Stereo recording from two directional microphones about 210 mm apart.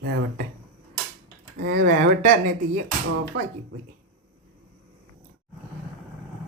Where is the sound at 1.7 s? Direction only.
60° right (ahead or behind).